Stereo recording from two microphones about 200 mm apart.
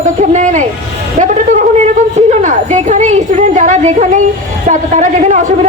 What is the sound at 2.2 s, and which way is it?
A woman's voice, 35° right (ahead or behind).